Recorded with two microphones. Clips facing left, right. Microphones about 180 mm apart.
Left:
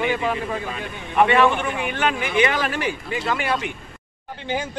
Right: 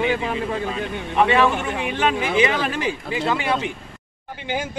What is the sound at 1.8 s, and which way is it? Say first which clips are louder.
Speech: right 5 dB; 30° right (ahead or behind).